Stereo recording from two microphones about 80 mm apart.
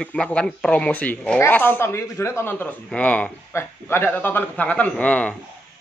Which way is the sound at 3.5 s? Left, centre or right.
Left.